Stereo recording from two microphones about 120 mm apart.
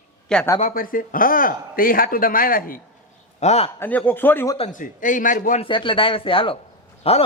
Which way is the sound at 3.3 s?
65° left (ahead or behind).